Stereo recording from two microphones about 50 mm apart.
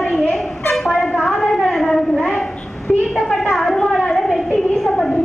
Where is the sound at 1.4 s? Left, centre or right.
Centre.